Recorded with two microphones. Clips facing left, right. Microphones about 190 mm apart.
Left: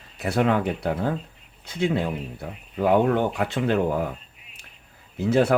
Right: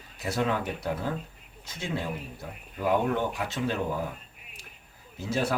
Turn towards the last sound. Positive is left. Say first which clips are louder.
# left 9 dB
turn(degrees=60)  # may be behind; listen again after turning